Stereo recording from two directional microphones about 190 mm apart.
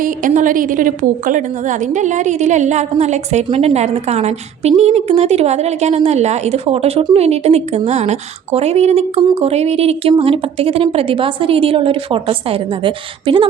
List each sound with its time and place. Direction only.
0.0 s a woman's voice: 45° right (ahead or behind); by 13.4 s 25° right (ahead or behind)